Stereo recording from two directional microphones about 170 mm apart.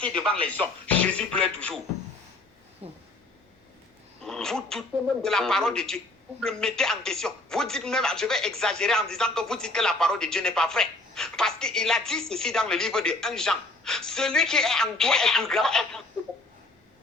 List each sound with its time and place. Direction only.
0.1 s speech: 30° right (ahead or behind)
0.4 s speech: 10° left (ahead or behind)
2.8 s speech: 35° right (ahead or behind)
4.2 s a sound: 5° left (ahead or behind)
5.2 s speech: 5° left (ahead or behind)